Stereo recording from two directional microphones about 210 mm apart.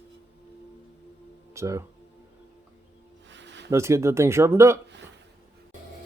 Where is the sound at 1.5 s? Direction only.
15° right (ahead or behind).